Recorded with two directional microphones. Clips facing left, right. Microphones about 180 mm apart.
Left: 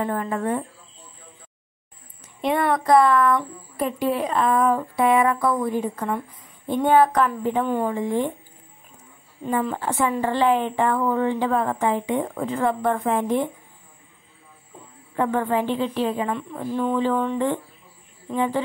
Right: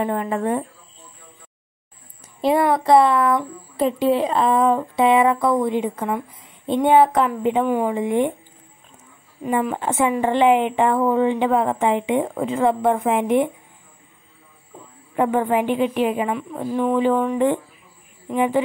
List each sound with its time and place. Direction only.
0.0 s a woman's voice: 20° right (ahead or behind)
2.7 s a woman's voice: 25° right (ahead or behind)
9.4 s a woman's voice: 10° right (ahead or behind)
15.1 s a woman's voice: 15° right (ahead or behind)